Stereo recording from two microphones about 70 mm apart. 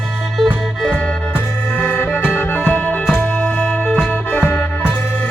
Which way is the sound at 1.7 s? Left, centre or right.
Left.